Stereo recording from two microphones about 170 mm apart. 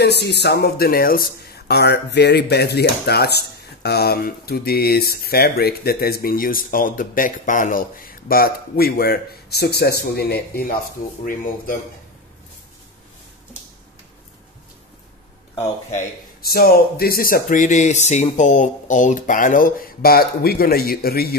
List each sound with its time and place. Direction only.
0.0 s speech: 80° left; by 7.8 s 50° left (ahead or behind)
8.3 s speech: 60° left (ahead or behind)
11.2 s speech: 55° left (ahead or behind)
16.3 s speech: 60° left (ahead or behind)